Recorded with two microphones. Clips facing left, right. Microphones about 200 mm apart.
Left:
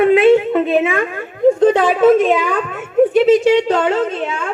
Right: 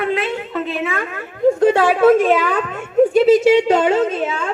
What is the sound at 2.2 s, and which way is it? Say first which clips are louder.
Speech: even; 15° left (ahead or behind).